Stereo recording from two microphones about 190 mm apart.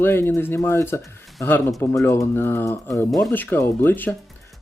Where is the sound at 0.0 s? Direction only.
10° left (ahead or behind).